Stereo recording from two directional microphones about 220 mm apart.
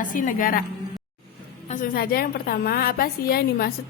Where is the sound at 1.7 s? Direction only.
40° left (ahead or behind).